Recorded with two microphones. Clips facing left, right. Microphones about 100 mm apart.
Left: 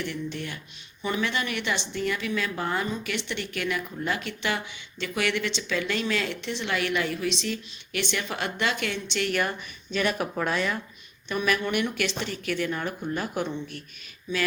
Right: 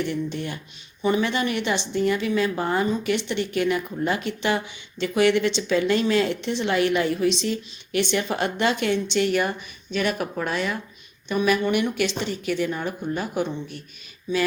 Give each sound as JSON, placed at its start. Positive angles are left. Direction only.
{"t": 0.1, "sound": "a woman's voice", "side_deg": -30}
{"t": 9.9, "sound": "speech", "side_deg": -5}
{"t": 11.3, "sound": "speech", "side_deg": -15}